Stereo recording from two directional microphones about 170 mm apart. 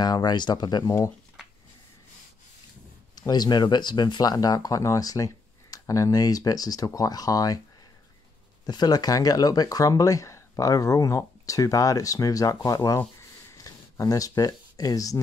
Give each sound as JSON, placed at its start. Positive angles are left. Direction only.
{"t": 0.0, "sound": "speech", "side_deg": 25}
{"t": 3.2, "sound": "speech", "side_deg": 25}
{"t": 8.6, "sound": "speech", "side_deg": 25}